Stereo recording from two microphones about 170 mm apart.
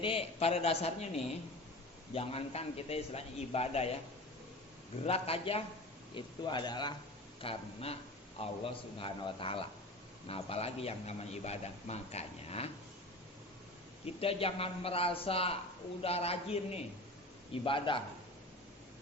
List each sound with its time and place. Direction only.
0.0 s speech: 35° left (ahead or behind)
5.0 s speech: 35° left (ahead or behind)
14.0 s speech: 35° left (ahead or behind)